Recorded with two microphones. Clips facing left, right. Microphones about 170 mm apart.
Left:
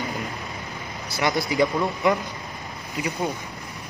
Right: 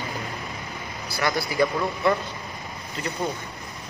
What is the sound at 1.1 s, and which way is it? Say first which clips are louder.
A man's voice: left 2 dB; 20° left (ahead or behind).